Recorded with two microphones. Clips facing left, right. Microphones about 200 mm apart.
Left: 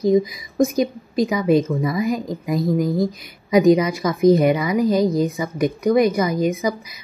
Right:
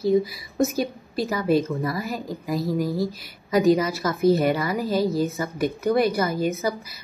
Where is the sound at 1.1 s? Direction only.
15° left (ahead or behind).